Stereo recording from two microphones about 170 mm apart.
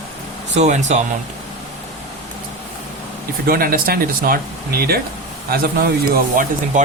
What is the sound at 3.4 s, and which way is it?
Speech, 60° right (ahead or behind).